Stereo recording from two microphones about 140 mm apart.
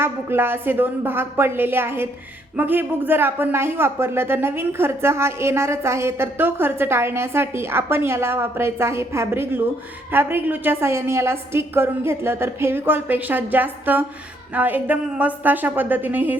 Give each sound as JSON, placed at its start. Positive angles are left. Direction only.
{"t": 0.0, "sound": "speech", "side_deg": -15}